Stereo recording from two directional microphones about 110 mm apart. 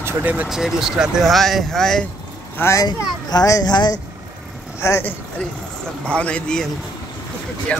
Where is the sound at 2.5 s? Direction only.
25° left (ahead or behind).